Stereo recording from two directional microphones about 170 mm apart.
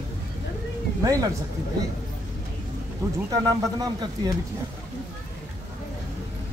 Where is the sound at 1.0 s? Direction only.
20° right (ahead or behind).